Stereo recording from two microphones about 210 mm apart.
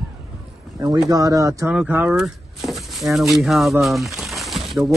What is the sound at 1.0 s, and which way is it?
A man's voice, 15° right (ahead or behind).